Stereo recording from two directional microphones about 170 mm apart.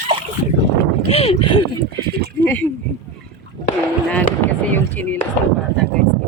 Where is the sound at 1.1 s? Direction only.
35° left (ahead or behind).